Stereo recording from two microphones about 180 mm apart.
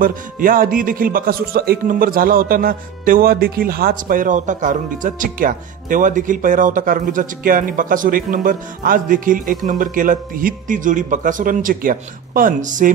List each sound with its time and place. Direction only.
0.0 s a man's voice: 50° right (ahead or behind)